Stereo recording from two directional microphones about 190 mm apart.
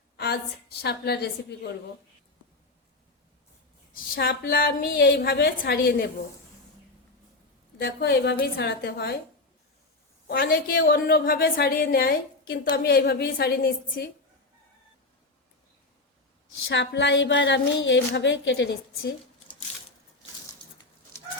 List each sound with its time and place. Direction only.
0.2 s a woman's voice: 60° left (ahead or behind)
3.9 s a woman's voice: 50° left (ahead or behind)
7.8 s a woman's voice: 60° left (ahead or behind)
10.2 s a woman's voice: 50° left (ahead or behind)
16.6 s a woman's voice: 70° left (ahead or behind)